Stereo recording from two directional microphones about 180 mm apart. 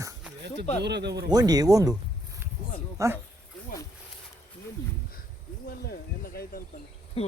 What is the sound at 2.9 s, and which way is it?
Speech, 15° right (ahead or behind).